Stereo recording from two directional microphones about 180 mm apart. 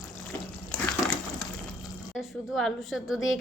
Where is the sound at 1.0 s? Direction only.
20° left (ahead or behind).